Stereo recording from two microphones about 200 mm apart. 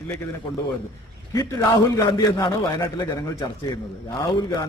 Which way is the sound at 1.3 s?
15° left (ahead or behind).